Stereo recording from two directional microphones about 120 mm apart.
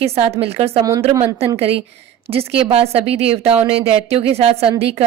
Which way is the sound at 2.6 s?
55° right (ahead or behind).